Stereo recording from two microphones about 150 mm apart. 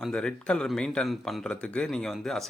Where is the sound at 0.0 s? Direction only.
5° left (ahead or behind).